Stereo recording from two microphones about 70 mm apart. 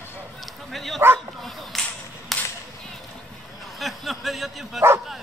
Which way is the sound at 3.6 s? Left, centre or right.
Centre.